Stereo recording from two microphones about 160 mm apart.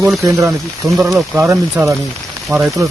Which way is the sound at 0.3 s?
15° right (ahead or behind).